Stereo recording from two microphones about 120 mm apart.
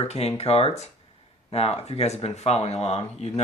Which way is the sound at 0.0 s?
60° left (ahead or behind).